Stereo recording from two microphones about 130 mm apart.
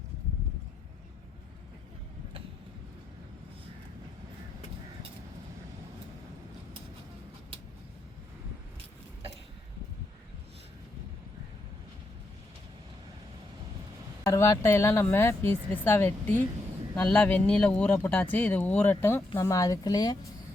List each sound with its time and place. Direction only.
14.3 s speech: 25° left (ahead or behind)